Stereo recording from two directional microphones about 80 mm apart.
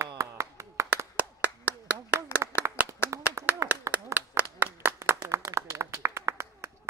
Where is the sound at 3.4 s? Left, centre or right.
Right.